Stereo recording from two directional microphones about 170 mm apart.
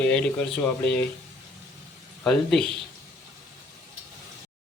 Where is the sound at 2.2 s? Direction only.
5° left (ahead or behind).